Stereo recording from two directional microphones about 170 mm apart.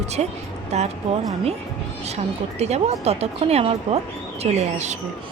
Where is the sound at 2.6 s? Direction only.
40° right (ahead or behind).